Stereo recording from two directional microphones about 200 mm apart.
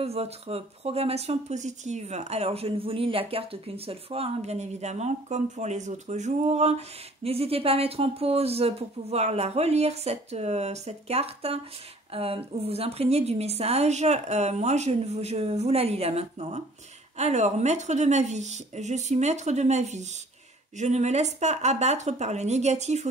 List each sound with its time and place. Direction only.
0.0 s speech: 30° right (ahead or behind)